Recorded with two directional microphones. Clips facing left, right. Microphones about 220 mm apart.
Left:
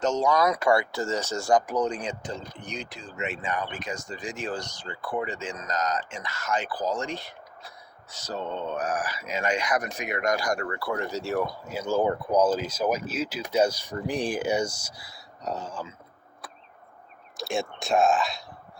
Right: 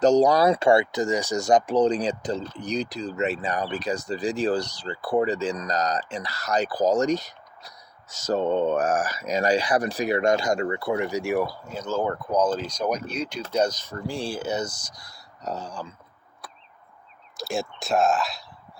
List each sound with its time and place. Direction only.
0.0 s speech: 35° right (ahead or behind); by 11.5 s 15° right (ahead or behind)
11.6 s speech: 10° left (ahead or behind)
17.3 s speech: centre (ahead or behind)